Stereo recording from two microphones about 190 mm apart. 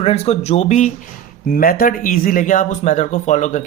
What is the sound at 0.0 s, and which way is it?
Speech, 30° left (ahead or behind).